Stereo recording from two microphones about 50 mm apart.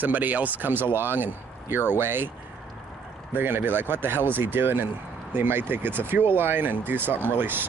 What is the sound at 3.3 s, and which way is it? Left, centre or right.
Speech, right.